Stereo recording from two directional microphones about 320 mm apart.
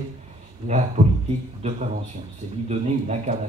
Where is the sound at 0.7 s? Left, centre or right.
Right.